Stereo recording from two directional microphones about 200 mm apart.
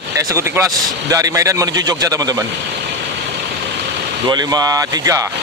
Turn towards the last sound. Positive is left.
turn(degrees=-15)  # may be behind; listen again after turning